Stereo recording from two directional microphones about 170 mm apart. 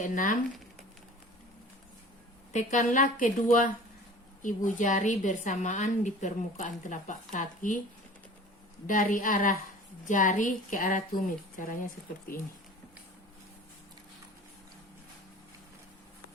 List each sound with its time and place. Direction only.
0.1 s a woman's voice: 50° left (ahead or behind)
2.5 s a woman's voice: 45° left (ahead or behind)
8.9 s a woman's voice: 55° left (ahead or behind)